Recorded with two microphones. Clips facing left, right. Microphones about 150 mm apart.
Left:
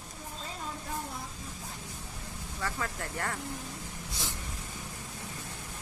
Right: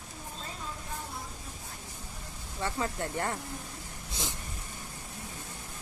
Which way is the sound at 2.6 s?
25° right (ahead or behind).